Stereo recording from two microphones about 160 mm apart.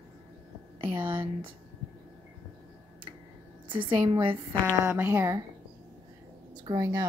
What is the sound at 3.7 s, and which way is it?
Speech, 30° right (ahead or behind).